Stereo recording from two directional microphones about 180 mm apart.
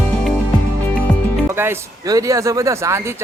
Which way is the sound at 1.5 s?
15° right (ahead or behind).